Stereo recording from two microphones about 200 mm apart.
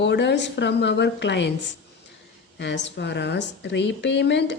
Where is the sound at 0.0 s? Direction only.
60° left (ahead or behind).